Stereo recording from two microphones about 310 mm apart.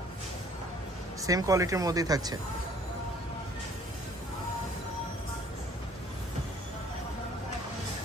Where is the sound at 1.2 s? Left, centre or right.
Centre.